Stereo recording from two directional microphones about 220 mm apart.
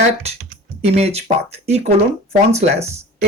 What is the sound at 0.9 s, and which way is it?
Speech, 30° right (ahead or behind).